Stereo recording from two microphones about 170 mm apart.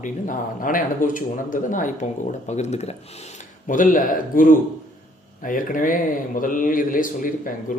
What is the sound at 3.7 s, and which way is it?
A man's voice, 50° left (ahead or behind).